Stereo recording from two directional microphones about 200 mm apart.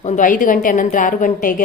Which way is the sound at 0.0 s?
40° left (ahead or behind).